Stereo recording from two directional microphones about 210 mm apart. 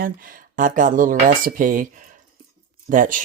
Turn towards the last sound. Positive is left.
turn(degrees=-40)  # may be behind; listen again after turning